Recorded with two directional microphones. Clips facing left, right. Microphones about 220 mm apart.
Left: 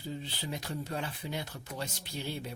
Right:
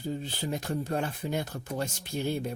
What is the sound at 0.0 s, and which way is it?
Speech, 45° right (ahead or behind).